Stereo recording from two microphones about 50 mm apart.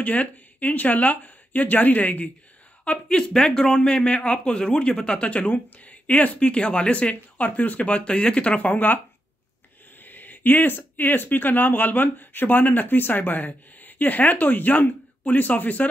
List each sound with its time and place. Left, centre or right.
0.0 s speech: left
2.8 s speech: left
10.0 s speech: left